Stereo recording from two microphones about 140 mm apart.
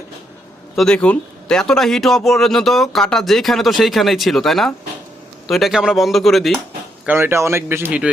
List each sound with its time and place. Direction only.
0.8 s a man's voice: 5° left (ahead or behind)
7.0 s speech: 15° right (ahead or behind)